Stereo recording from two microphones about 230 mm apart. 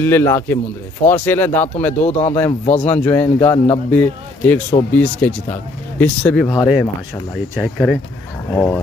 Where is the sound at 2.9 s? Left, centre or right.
Centre.